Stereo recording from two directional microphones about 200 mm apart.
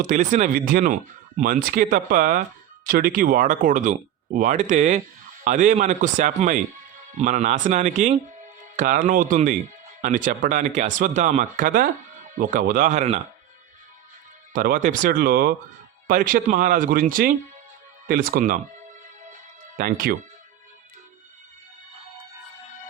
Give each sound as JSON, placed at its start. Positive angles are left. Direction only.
{"t": 0.0, "sound": "speech", "side_deg": -40}
{"t": 14.5, "sound": "speech", "side_deg": -45}
{"t": 19.7, "sound": "speech", "side_deg": -45}